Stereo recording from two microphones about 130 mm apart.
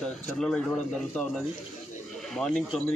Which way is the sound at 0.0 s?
5° left (ahead or behind).